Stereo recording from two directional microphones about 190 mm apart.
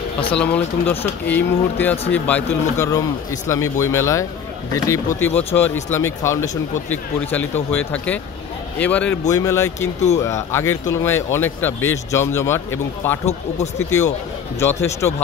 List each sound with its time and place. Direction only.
0.3 s speech: 5° left (ahead or behind)
13.2 s speech: 35° left (ahead or behind)
15.0 s speech: 10° left (ahead or behind)